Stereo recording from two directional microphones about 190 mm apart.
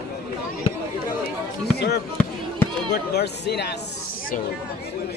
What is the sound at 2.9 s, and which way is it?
Speech, 60° left (ahead or behind).